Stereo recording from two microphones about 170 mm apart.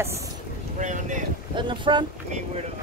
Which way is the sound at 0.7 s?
45° right (ahead or behind).